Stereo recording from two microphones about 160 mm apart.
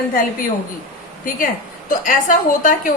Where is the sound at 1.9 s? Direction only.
55° left (ahead or behind).